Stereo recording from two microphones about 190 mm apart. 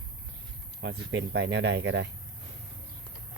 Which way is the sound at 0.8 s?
70° right (ahead or behind).